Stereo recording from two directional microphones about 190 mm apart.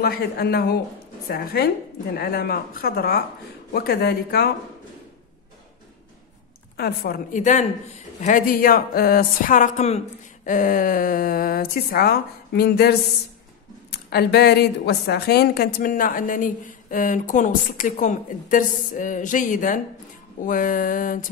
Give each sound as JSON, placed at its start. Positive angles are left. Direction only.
{"t": 0.0, "sound": "a woman's voice", "side_deg": 55}
{"t": 6.8, "sound": "a woman's voice", "side_deg": 45}
{"t": 13.9, "sound": "a woman's voice", "side_deg": 60}